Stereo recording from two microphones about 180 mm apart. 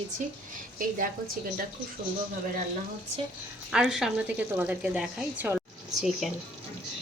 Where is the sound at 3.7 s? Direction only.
Centre (ahead or behind).